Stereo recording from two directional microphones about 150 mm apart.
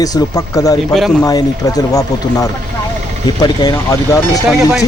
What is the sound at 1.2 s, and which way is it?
Speech, 25° left (ahead or behind).